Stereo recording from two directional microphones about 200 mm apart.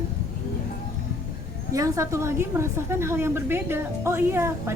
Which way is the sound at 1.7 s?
15° right (ahead or behind).